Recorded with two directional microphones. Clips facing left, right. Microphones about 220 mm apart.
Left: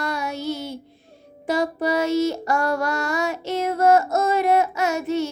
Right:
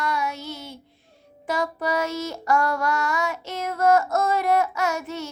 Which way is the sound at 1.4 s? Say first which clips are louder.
Left 4 dB; 30° left (ahead or behind).